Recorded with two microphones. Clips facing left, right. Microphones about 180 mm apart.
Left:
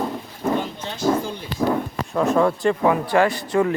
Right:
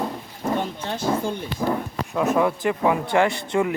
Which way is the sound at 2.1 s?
5° right (ahead or behind).